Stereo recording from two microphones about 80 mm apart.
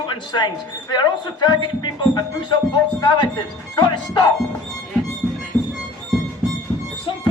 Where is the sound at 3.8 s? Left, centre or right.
Left.